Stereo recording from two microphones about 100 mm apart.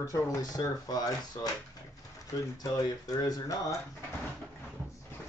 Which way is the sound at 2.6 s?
40° left (ahead or behind).